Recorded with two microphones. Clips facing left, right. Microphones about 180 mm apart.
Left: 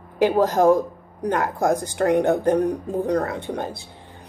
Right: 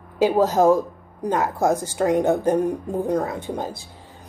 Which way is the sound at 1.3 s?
55° left (ahead or behind).